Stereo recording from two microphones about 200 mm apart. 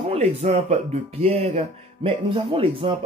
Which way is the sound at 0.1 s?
35° right (ahead or behind).